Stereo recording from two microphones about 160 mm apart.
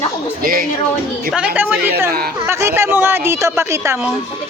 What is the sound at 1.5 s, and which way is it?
Speech, 10° right (ahead or behind).